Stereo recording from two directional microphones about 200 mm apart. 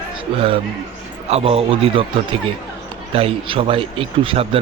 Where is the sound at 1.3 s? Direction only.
30° right (ahead or behind).